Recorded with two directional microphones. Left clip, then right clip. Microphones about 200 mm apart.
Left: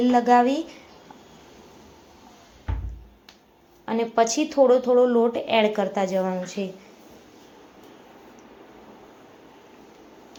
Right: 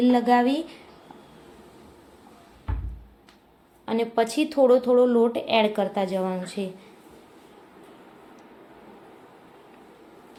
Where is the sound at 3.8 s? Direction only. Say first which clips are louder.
Left 2 dB; 5° right (ahead or behind).